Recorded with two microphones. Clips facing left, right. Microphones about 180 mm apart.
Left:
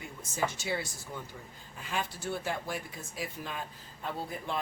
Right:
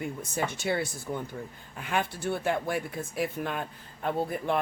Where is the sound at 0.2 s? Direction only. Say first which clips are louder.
Right 2 dB; 60° right (ahead or behind).